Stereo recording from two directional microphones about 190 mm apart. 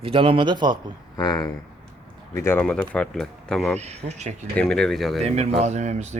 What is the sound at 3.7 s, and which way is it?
Speech, 35° right (ahead or behind).